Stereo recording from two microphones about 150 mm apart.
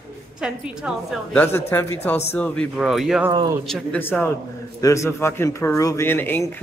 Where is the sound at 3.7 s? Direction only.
10° left (ahead or behind).